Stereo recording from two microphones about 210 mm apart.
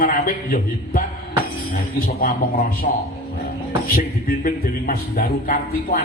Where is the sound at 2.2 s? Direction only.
45° left (ahead or behind).